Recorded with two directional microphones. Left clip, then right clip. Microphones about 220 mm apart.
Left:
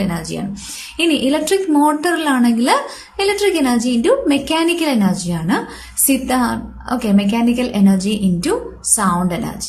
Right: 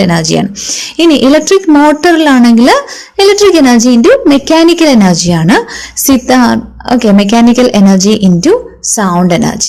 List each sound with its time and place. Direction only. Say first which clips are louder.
0.0 s speech: right 14 dB; 35° right (ahead or behind)